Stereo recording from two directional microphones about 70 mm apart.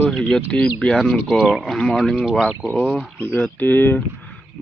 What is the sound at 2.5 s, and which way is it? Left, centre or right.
Speech, left.